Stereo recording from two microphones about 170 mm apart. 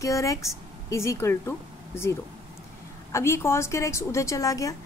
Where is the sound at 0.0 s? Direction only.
20° left (ahead or behind).